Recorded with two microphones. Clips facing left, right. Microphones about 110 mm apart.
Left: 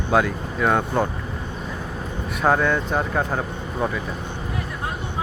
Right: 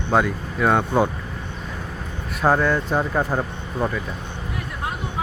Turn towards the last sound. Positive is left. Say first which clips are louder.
# even
turn(degrees=0)  # may be behind; listen again after turning